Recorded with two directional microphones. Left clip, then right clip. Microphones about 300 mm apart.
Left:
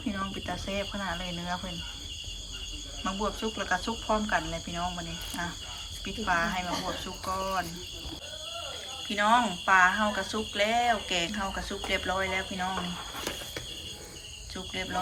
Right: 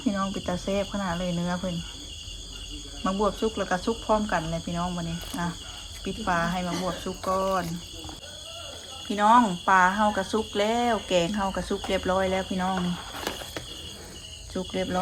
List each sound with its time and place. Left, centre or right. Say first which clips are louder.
0.0 s speech: right 5 dB; centre
3.0 s speech: right 6 dB; centre
9.0 s speech: right 5 dB; centre
14.5 s speech: right 6 dB; centre